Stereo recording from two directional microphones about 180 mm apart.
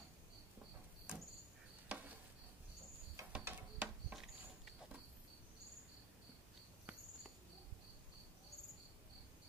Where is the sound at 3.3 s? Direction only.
5° right (ahead or behind).